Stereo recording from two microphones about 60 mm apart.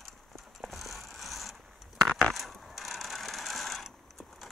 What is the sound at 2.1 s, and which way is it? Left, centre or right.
Mechanisms, centre.